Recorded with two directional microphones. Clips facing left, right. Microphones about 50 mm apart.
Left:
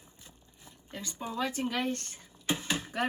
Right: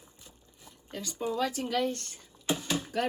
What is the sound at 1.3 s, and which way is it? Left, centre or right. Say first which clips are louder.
Speech: right 2 dB; left.